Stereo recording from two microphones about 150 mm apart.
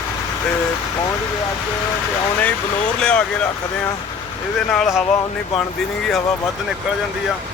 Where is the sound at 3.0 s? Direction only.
5° left (ahead or behind).